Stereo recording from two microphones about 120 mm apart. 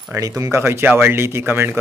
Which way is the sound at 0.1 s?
30° right (ahead or behind).